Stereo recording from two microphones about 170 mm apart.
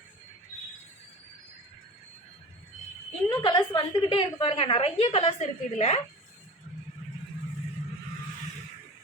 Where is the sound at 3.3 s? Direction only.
25° left (ahead or behind).